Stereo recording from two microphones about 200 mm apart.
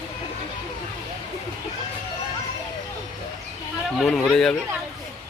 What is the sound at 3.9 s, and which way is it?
Speech, 5° left (ahead or behind).